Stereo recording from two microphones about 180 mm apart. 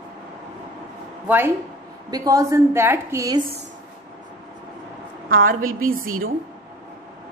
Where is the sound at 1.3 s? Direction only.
10° right (ahead or behind).